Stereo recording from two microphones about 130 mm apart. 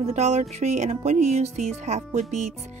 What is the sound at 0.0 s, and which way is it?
Speech, 60° right (ahead or behind).